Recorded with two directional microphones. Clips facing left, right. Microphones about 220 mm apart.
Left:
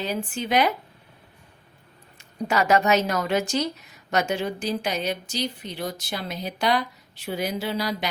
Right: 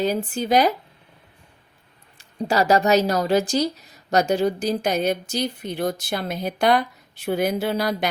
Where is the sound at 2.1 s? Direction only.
30° right (ahead or behind).